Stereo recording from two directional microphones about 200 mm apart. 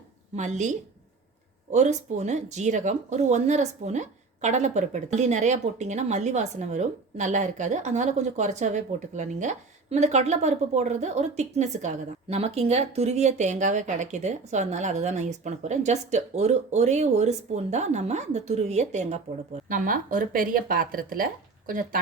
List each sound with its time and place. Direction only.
0.3 s speech: 35° right (ahead or behind)
1.7 s speech: 35° right (ahead or behind)